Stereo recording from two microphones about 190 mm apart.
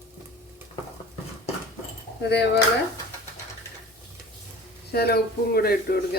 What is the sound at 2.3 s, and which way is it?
Speech, 60° left (ahead or behind).